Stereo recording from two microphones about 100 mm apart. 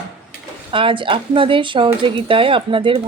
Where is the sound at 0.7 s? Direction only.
60° right (ahead or behind).